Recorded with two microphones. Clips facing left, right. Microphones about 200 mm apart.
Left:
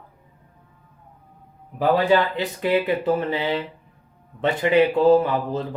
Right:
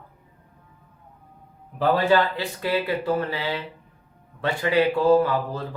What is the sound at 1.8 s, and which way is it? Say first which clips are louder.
Speech: left 1 dB; 15° left (ahead or behind).